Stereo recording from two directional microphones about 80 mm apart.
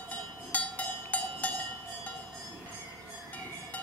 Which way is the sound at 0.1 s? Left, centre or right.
Centre.